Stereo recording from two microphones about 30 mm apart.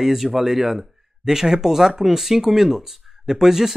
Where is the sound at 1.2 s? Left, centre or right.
Centre.